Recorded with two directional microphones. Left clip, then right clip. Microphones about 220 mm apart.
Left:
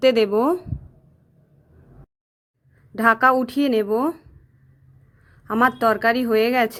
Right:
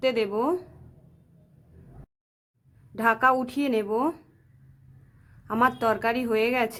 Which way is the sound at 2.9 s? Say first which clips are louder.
Left 5 dB; 20° left (ahead or behind).